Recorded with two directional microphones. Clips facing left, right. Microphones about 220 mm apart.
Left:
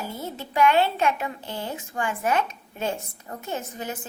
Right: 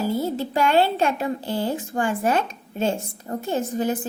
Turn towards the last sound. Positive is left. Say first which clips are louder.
# right 10 dB
turn(degrees=-30)  # may be behind; listen again after turning